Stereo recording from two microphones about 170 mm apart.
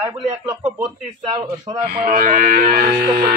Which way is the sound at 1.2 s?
35° right (ahead or behind).